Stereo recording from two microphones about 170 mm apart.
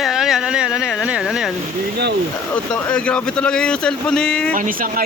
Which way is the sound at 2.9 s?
5° left (ahead or behind).